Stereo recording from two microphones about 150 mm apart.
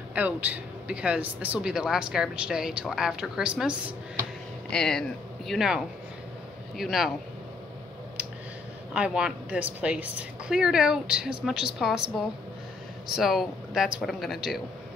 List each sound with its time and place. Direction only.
0.1 s speech: 10° right (ahead or behind)
6.8 s speech: centre (ahead or behind)
8.9 s speech: 5° right (ahead or behind)